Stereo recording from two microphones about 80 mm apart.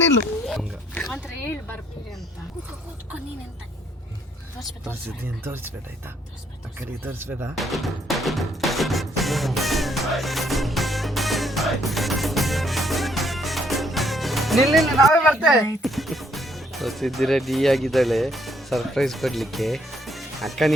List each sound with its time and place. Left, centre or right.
5.4 s speech: right
6.7 s speech: right
7.5 s music: centre
15.3 s speech: centre
15.8 s speech: centre